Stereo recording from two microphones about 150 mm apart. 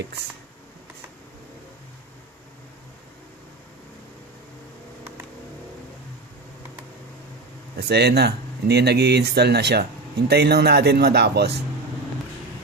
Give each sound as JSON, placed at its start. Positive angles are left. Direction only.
{"t": 7.8, "sound": "speech", "side_deg": -90}